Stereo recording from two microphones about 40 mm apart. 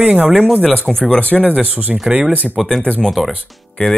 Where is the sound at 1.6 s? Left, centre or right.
Right.